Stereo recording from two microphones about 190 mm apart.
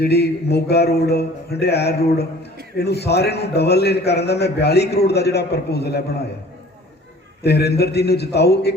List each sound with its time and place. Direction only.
0.0 s a man's voice: 60° left (ahead or behind)
7.4 s a man's voice: 60° left (ahead or behind)